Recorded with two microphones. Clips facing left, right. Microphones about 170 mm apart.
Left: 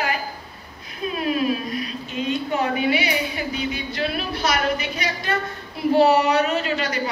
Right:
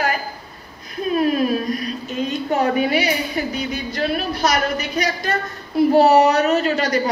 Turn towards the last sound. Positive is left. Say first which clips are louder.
# right 6 dB
turn(degrees=-40)  # may be behind; listen again after turning